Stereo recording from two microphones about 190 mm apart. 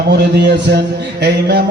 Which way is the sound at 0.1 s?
60° right (ahead or behind).